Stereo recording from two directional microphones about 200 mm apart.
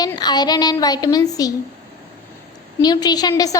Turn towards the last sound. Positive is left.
turn(degrees=20)  # may be behind; listen again after turning